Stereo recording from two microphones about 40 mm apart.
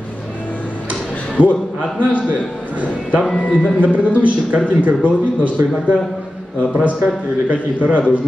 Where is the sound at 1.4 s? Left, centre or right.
Right.